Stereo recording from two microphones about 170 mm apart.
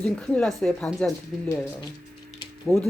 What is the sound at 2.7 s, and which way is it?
Speech, 10° left (ahead or behind).